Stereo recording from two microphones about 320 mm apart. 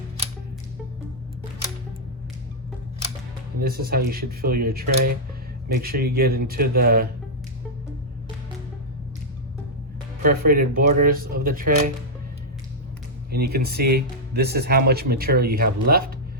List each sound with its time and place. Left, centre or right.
3.6 s speech: right
10.2 s speech: right
13.5 s speech: right